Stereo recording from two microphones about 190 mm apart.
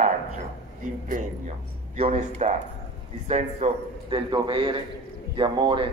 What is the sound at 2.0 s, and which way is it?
A man's voice, 35° right (ahead or behind).